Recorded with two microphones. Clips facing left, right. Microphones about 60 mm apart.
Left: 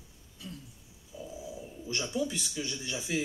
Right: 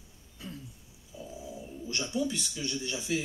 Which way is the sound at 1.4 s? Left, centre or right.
Centre.